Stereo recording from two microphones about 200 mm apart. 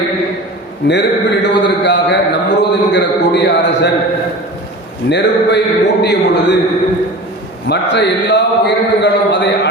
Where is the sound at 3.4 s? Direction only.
60° left (ahead or behind).